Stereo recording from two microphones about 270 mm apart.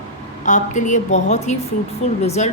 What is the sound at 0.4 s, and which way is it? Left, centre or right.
A woman's voice, left.